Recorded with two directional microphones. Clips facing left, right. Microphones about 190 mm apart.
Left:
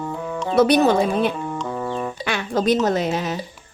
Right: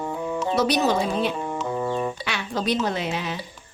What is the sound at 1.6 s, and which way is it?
Music, 10° right (ahead or behind).